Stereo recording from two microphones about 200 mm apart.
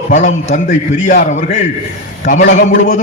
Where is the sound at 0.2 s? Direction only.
40° left (ahead or behind).